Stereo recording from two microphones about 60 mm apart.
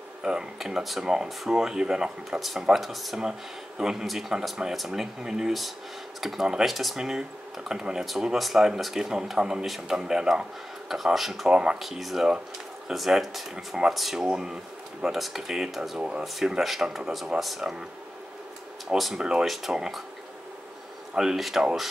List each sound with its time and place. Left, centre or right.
0.2 s speech: centre
16.0 s speech: centre
16.3 s speech: centre
18.9 s speech: centre
21.1 s speech: centre